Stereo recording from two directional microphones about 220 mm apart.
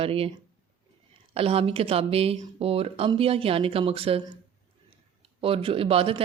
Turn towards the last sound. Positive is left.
turn(degrees=-25)  # may be behind; listen again after turning